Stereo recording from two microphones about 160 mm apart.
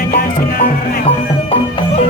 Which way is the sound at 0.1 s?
65° left (ahead or behind).